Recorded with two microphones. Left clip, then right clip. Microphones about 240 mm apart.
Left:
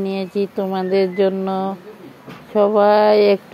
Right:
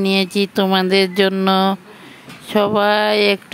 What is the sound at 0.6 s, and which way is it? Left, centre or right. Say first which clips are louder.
Speech: right 5 dB; right.